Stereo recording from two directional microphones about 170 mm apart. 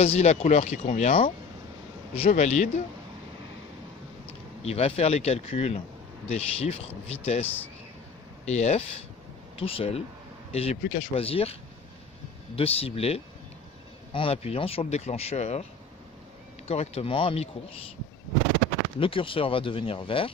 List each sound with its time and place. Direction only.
0.0 s speech: 40° left (ahead or behind)
4.6 s speech: 40° left (ahead or behind)
8.5 s speech: 40° left (ahead or behind)
12.5 s speech: 35° left (ahead or behind)
16.6 s speech: 40° left (ahead or behind)
18.9 s speech: 30° left (ahead or behind)